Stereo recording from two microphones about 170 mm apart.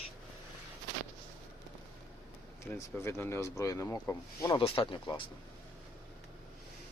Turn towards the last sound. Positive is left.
turn(degrees=30)  # may be behind; listen again after turning